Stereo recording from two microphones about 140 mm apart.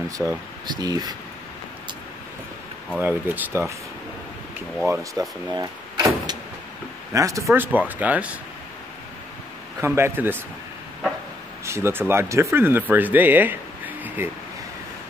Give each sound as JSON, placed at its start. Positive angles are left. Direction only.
{"t": 0.2, "sound": "speech", "side_deg": -5}
{"t": 0.7, "sound": "speech", "side_deg": -30}
{"t": 3.0, "sound": "speech", "side_deg": -15}
{"t": 5.2, "sound": "speech", "side_deg": -25}
{"t": 5.5, "sound": "vehicle", "side_deg": -30}
{"t": 7.1, "sound": "speech", "side_deg": -20}
{"t": 9.8, "sound": "speech", "side_deg": -20}
{"t": 11.6, "sound": "speech", "side_deg": -20}